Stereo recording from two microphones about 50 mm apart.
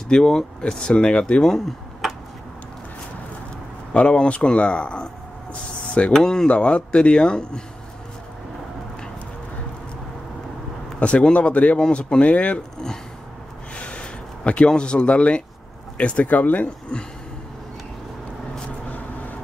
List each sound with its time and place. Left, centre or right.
0.1 s speech: centre
2.0 s tick-tock: centre
3.9 s speech: centre
6.1 s speech: centre
6.5 s speech: left
11.0 s speech: left
13.7 s a sound: left
16.0 s speech: left
18.9 s vehicle: left